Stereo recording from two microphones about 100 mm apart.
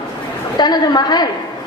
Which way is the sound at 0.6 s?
45° left (ahead or behind).